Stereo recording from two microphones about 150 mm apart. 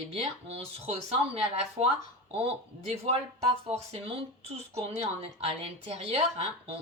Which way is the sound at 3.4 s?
45° right (ahead or behind).